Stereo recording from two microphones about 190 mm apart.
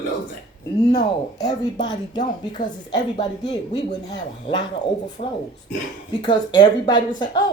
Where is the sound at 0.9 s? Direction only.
20° left (ahead or behind).